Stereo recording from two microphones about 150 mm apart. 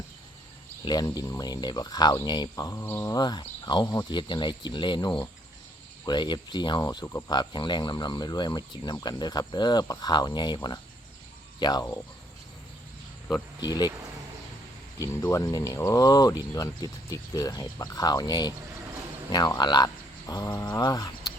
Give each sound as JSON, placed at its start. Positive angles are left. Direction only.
{"t": 0.9, "sound": "speech", "side_deg": 25}
{"t": 13.6, "sound": "speech", "side_deg": 25}
{"t": 15.0, "sound": "speech", "side_deg": 20}